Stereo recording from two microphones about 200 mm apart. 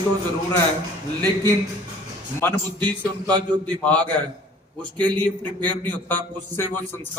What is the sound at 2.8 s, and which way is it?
Speech, 20° right (ahead or behind).